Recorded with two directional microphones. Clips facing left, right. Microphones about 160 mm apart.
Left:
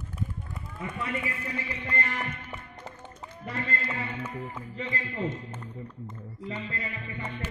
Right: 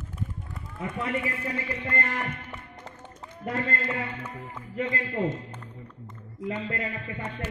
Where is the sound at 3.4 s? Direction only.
55° right (ahead or behind).